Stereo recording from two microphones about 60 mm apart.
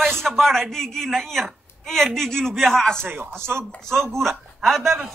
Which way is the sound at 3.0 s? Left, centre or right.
Right.